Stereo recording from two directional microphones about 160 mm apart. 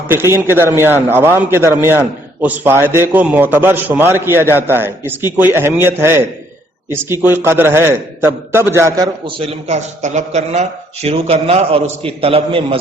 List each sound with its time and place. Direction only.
0.1 s a man's voice: 15° right (ahead or behind)
9.2 s a man's voice: 40° right (ahead or behind)